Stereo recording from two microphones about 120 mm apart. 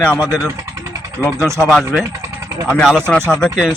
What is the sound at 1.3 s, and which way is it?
Speech, 25° right (ahead or behind).